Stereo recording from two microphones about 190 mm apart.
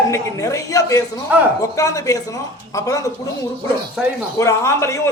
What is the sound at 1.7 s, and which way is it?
A man's voice, 15° left (ahead or behind).